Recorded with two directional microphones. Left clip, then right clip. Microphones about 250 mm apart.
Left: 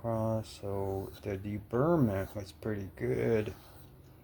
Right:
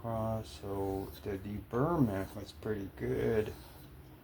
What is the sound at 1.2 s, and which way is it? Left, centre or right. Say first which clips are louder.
Speech: left 2 dB; left.